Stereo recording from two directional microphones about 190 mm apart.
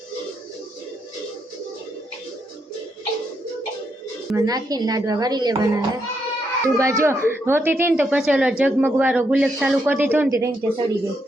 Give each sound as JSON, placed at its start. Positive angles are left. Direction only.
{"t": 4.4, "sound": "speech", "side_deg": -20}